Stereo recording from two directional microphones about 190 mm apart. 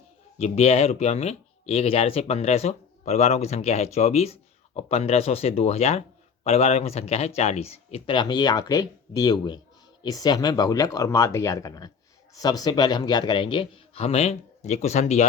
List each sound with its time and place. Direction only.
0.3 s a man's voice: 35° left (ahead or behind)